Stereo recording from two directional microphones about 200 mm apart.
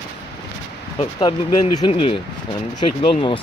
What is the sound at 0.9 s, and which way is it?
Speech, 20° left (ahead or behind).